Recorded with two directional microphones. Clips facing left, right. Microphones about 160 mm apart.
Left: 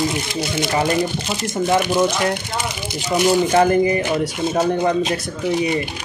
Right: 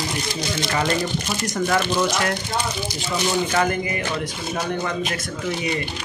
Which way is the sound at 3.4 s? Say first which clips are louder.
Left 7 dB; 35° left (ahead or behind).